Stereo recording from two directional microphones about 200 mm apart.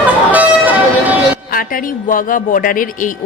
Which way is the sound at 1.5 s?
45° left (ahead or behind).